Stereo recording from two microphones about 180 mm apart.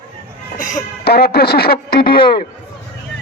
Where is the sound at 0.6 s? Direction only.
55° left (ahead or behind).